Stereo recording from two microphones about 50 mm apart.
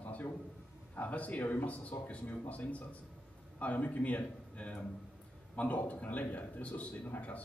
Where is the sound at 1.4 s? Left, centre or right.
Left.